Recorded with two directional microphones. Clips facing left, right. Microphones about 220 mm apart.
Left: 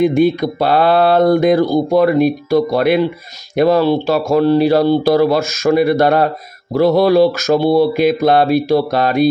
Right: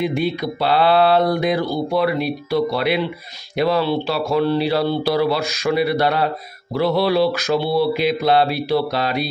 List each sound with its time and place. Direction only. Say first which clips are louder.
0.0 s speech: left 8 dB; 45° left (ahead or behind)